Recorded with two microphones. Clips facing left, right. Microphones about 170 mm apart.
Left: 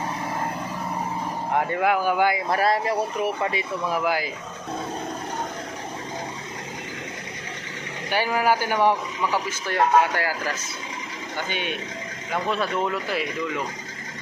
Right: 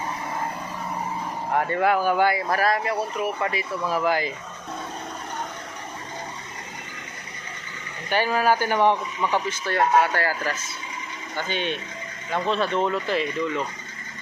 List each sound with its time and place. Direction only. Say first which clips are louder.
1.5 s a man's voice: right 1 dB; 10° left (ahead or behind)
8.1 s a man's voice: right 1 dB; 15° left (ahead or behind)